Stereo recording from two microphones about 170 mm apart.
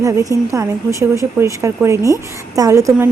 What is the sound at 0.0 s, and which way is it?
A woman's voice, 20° right (ahead or behind).